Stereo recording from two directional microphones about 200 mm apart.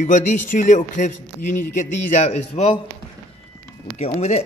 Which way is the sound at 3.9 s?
30° left (ahead or behind).